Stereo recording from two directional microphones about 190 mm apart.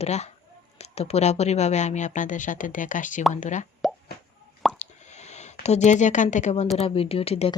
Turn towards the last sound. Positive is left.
turn(degrees=30)  # may be behind; listen again after turning